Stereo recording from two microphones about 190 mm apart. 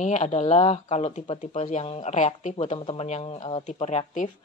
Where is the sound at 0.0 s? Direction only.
40° left (ahead or behind).